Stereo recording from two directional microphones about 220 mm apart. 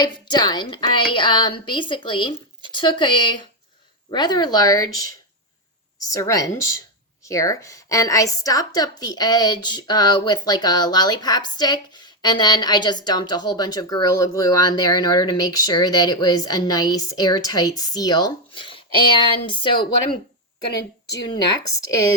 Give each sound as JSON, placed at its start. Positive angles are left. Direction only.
{"t": 0.0, "sound": "a woman's voice", "side_deg": 20}
{"t": 6.1, "sound": "a woman's voice", "side_deg": 15}